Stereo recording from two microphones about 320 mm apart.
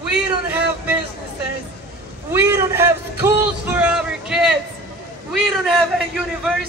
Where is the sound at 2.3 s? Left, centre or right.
Centre.